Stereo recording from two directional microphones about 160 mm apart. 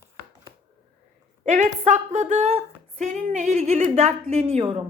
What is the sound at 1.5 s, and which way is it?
A woman's voice, 50° right (ahead or behind).